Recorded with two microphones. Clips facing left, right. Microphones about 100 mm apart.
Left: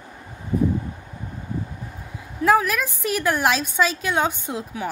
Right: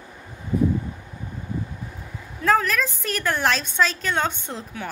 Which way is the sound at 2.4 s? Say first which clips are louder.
Left 2 dB; 10° left (ahead or behind).